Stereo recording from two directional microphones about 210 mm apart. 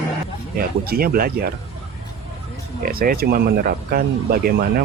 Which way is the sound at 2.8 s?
45° right (ahead or behind).